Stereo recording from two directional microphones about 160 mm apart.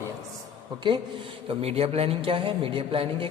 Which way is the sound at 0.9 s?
30° right (ahead or behind).